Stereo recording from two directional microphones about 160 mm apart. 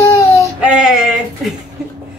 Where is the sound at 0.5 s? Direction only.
5° right (ahead or behind).